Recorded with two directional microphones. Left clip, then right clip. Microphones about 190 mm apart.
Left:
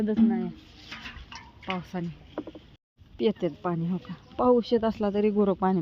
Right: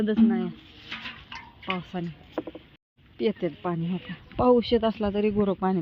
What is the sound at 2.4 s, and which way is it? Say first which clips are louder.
Rowboat: right 4 dB; 25° right (ahead or behind).